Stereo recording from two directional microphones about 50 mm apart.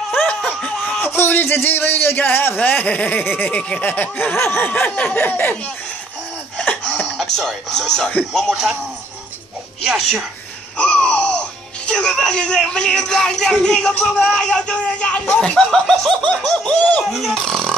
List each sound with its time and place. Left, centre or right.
0.6 s a sound: centre
1.0 s a man's voice: left
4.4 s a man's voice: left
4.7 s speech: left
7.2 s speech: centre
9.8 s speech: centre
10.8 s speech: left
13.6 s laughter: centre
14.2 s speech: centre
15.5 s laughter: centre
17.0 s speech: centre
17.4 s a sound: centre